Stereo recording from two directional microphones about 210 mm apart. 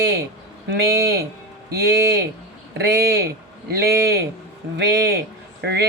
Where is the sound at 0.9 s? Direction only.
50° right (ahead or behind).